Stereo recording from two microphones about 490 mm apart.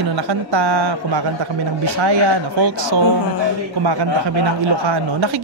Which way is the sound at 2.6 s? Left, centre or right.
Right.